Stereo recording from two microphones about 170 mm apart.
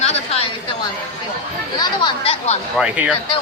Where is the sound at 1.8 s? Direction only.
30° left (ahead or behind).